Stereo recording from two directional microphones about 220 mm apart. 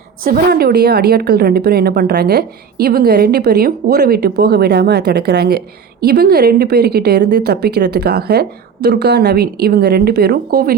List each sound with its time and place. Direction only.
0.3 s a woman's voice: 45° right (ahead or behind)